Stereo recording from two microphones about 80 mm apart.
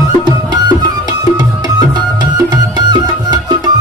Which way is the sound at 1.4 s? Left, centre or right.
Right.